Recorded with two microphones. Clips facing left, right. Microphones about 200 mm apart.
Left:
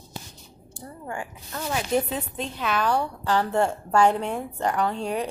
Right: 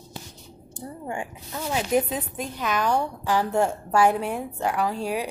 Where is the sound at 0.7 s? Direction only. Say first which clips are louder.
Right 2 dB; 20° right (ahead or behind).